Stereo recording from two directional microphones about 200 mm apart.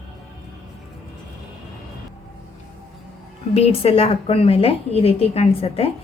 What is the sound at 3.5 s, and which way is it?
A woman's voice, 30° left (ahead or behind).